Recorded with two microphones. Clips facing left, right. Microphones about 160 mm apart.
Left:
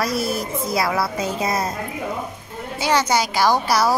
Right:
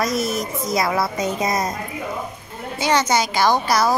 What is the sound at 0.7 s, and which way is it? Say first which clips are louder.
Speech: right 1 dB; 5° left (ahead or behind).